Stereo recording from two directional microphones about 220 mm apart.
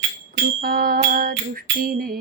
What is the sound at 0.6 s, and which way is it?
Music, 45° right (ahead or behind).